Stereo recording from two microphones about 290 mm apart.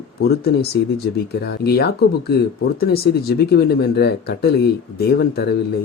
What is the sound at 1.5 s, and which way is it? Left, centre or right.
Speech, left.